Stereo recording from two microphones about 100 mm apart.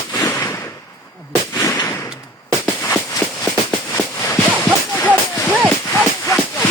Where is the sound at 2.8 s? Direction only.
25° left (ahead or behind).